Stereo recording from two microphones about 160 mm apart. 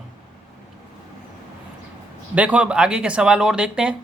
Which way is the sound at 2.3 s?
10° right (ahead or behind).